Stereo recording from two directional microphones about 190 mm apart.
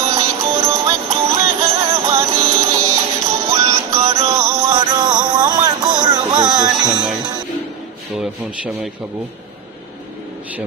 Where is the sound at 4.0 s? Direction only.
35° right (ahead or behind).